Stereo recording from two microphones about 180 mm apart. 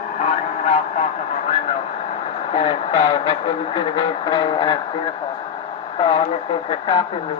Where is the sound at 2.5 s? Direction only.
30° left (ahead or behind).